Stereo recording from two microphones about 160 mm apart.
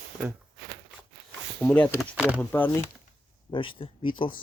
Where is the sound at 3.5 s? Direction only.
30° left (ahead or behind).